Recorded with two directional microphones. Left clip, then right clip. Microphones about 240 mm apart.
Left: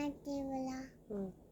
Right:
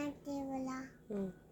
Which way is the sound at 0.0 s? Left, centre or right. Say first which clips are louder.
Left 1 dB; centre.